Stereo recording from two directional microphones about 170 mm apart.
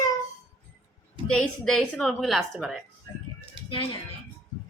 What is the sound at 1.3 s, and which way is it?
A woman's voice, 5° left (ahead or behind).